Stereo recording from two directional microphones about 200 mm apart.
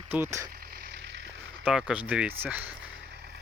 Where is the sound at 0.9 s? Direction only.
60° right (ahead or behind).